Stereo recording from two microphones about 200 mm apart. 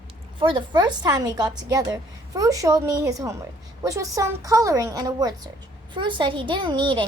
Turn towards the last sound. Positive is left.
turn(degrees=-25)  # may be behind; listen again after turning